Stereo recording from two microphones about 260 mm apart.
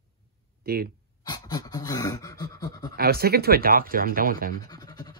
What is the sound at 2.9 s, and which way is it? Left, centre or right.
Speech, right.